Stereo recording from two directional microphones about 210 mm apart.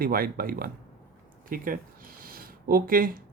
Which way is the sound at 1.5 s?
40° right (ahead or behind).